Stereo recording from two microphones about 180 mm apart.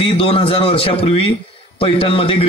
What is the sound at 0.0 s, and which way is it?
A man's voice, 30° left (ahead or behind).